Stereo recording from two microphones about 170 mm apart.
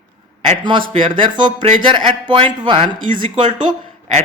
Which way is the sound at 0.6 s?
30° right (ahead or behind).